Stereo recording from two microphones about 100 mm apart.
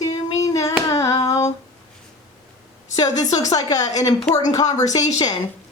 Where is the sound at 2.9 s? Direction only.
40° left (ahead or behind).